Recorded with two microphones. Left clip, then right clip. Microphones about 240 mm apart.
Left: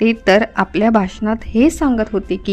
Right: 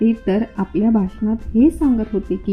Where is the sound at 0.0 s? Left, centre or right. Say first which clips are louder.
Left 7 dB; left.